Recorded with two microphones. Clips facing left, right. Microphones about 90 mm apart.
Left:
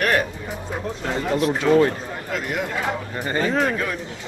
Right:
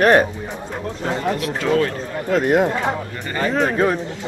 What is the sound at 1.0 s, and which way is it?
Speech, centre (ahead or behind).